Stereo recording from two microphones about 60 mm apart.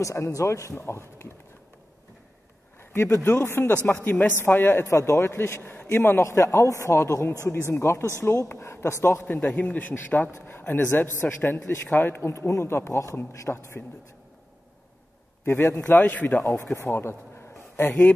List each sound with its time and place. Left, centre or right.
0.0 s speech: left
0.7 s a man's voice: left
2.8 s a sound: left
3.2 s a man's voice: left
4.9 s a man's voice: left
9.1 s a man's voice: left
12.2 s a man's voice: left
15.4 s a man's voice: left
16.1 s a man's voice: left
16.8 s a man's voice: left